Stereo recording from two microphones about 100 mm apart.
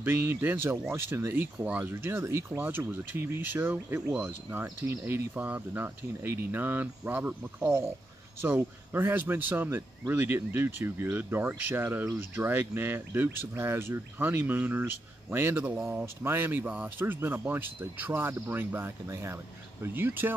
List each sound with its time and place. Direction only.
0.0 s speech: 20° right (ahead or behind)